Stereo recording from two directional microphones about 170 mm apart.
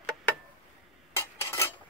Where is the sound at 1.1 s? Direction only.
15° left (ahead or behind).